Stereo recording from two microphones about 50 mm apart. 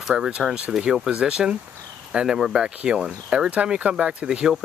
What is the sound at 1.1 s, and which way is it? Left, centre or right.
Speech, centre.